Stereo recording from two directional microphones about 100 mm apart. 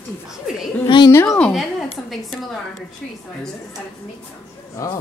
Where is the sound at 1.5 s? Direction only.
Centre (ahead or behind).